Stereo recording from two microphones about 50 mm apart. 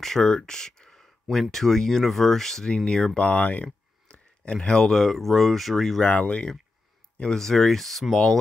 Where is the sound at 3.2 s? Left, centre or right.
Left.